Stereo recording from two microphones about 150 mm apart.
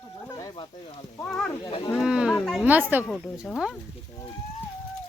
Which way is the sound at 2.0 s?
5° right (ahead or behind).